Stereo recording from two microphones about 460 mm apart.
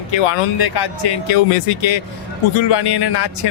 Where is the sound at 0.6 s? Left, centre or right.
Left.